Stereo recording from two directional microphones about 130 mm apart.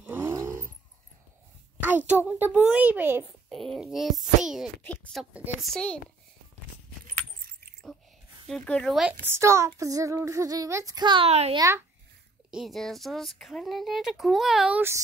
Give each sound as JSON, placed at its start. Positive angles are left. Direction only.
{"t": 0.0, "sound": "vehicle", "side_deg": -15}
{"t": 1.8, "sound": "a sound", "side_deg": -15}
{"t": 2.2, "sound": "a child's voice", "side_deg": -15}
{"t": 3.4, "sound": "speech", "side_deg": 0}
{"t": 4.8, "sound": "speech", "side_deg": 10}
{"t": 5.3, "sound": "a child's voice", "side_deg": -15}
{"t": 5.6, "sound": "speech", "side_deg": 5}
{"t": 8.5, "sound": "speech", "side_deg": 10}
{"t": 9.2, "sound": "female singing", "side_deg": -20}
{"t": 11.2, "sound": "a child's voice", "side_deg": -55}
{"t": 11.5, "sound": "female singing", "side_deg": -25}
{"t": 12.4, "sound": "speech", "side_deg": 0}